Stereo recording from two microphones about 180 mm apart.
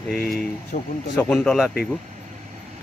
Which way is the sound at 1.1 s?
5° left (ahead or behind).